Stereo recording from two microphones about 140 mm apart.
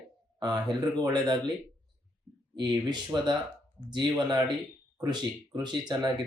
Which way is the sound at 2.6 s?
30° right (ahead or behind).